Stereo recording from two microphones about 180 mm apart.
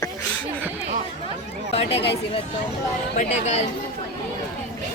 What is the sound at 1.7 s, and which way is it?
Chatter, 35° left (ahead or behind).